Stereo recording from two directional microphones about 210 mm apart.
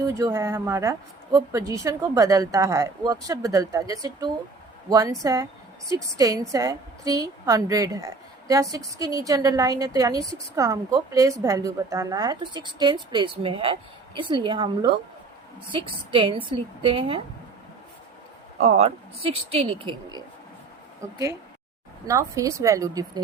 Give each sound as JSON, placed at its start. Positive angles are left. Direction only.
{"t": 0.1, "sound": "a woman's voice", "side_deg": -15}
{"t": 18.6, "sound": "a woman's voice", "side_deg": -30}